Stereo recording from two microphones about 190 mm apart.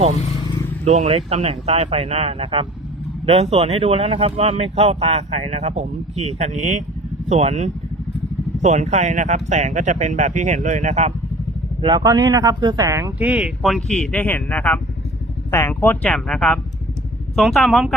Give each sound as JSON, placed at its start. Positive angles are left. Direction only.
{"t": 0.9, "sound": "speech", "side_deg": -35}
{"t": 11.8, "sound": "speech", "side_deg": -20}